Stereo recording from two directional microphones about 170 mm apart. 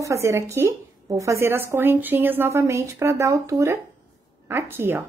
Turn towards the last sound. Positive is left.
turn(degrees=-15)  # may be behind; listen again after turning